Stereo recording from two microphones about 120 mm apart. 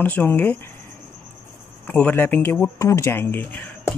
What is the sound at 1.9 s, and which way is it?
Speech, 10° left (ahead or behind).